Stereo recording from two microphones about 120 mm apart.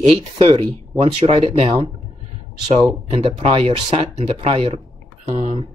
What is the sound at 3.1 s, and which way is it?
Speech, 55° right (ahead or behind).